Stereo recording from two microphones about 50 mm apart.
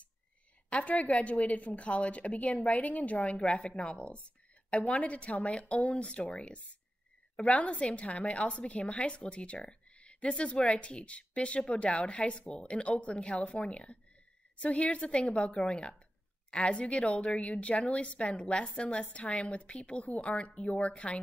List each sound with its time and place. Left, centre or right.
0.7 s a woman's voice: left